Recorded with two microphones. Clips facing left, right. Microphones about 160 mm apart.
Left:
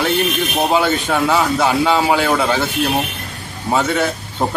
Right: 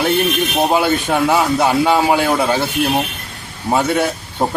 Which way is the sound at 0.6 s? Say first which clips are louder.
Right 1 dB; 5° right (ahead or behind).